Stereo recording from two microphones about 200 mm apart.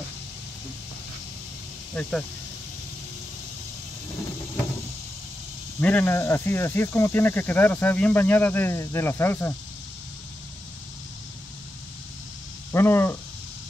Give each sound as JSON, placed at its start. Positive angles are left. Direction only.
{"t": 2.0, "sound": "speech", "side_deg": 0}
{"t": 5.8, "sound": "speech", "side_deg": 10}
{"t": 12.7, "sound": "a sound", "side_deg": 10}